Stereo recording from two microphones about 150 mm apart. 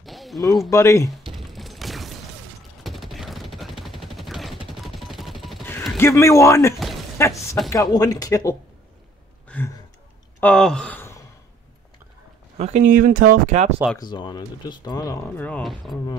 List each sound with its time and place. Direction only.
0.0 s a sound: centre (ahead or behind)
0.7 s speech: 20° left (ahead or behind)
1.3 s a sound: centre (ahead or behind)
2.8 s fusillade: centre (ahead or behind)
4.8 s music: centre (ahead or behind)
5.9 s a man's voice: 15° left (ahead or behind)
10.4 s a sound: 5° left (ahead or behind)
12.5 s speech: 50° right (ahead or behind)
13.9 s speech: 30° left (ahead or behind)
15.3 s speech: 10° left (ahead or behind)